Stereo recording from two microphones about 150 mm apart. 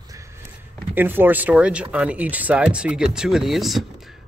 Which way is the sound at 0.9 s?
15° right (ahead or behind).